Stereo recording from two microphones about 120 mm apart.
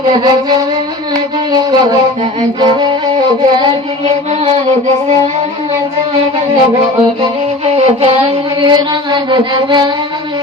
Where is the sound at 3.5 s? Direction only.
40° right (ahead or behind).